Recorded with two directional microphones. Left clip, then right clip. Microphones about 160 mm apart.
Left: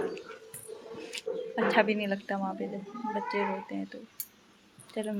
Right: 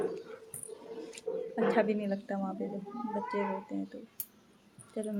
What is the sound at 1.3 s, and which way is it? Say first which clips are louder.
Speech: left 1 dB; 30° left (ahead or behind).